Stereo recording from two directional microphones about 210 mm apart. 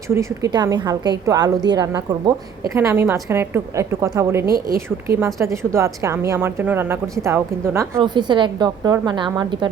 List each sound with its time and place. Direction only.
0.1 s a woman's voice: 15° right (ahead or behind)
4.4 s a woman's voice: 45° right (ahead or behind)
5.0 s a woman's voice: 15° right (ahead or behind)